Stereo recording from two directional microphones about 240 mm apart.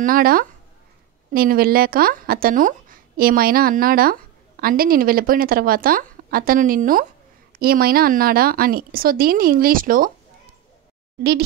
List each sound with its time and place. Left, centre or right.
0.0 s a woman's voice: right